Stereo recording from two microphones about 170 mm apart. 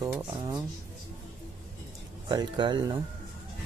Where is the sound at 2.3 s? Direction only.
25° right (ahead or behind).